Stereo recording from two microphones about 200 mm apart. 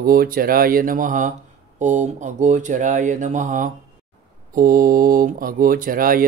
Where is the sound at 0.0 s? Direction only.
45° right (ahead or behind).